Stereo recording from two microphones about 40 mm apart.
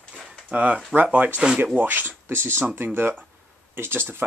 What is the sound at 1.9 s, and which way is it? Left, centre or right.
Speech, right.